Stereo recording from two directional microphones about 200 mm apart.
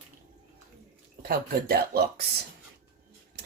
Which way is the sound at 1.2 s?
50° right (ahead or behind).